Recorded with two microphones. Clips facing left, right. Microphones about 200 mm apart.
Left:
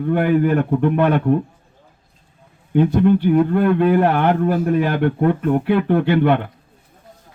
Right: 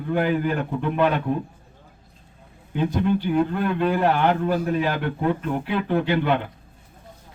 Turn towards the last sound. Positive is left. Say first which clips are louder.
# left 6 dB
turn(degrees=60)  # may be behind; listen again after turning